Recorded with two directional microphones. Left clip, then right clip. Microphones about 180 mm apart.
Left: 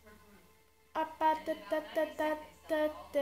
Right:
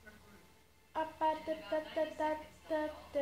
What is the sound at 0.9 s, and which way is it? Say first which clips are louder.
Speech: left 4 dB; 55° left (ahead or behind).